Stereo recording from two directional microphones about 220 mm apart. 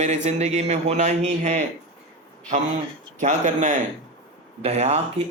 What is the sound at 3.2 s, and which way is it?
A man's voice, 35° right (ahead or behind).